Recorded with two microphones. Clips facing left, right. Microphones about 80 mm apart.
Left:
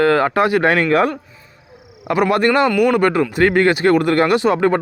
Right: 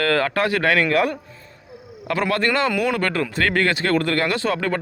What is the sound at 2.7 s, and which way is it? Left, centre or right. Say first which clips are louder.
Speech: left 7 dB; centre.